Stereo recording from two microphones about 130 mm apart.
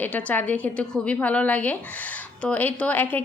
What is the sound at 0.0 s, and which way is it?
Speech, 10° left (ahead or behind).